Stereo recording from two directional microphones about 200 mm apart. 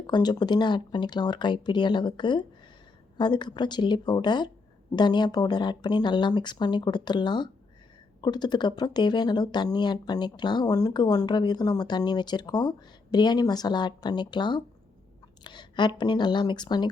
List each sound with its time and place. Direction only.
0.1 s speech: 20° left (ahead or behind)